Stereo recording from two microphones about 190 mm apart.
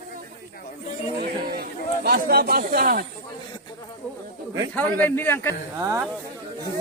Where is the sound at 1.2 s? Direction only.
50° right (ahead or behind).